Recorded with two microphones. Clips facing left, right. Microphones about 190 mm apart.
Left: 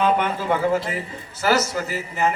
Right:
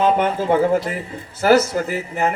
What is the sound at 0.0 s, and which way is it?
A man's voice, 45° right (ahead or behind).